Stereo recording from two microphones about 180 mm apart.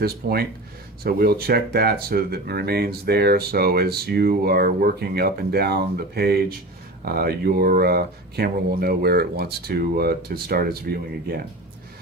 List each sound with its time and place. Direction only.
0.0 s speech: 60° right (ahead or behind)